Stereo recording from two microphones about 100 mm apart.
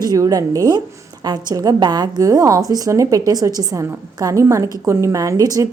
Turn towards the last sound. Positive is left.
turn(degrees=-35)  # may be behind; listen again after turning